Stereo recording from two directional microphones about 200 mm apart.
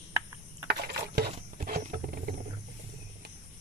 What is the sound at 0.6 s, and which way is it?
Wild animals, 50° right (ahead or behind).